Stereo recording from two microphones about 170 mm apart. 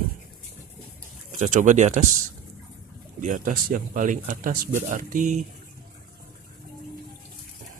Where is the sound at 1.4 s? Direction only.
50° right (ahead or behind).